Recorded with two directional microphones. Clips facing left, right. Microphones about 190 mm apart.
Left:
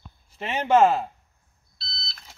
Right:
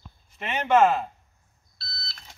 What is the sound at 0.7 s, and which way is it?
Speech, 35° left (ahead or behind).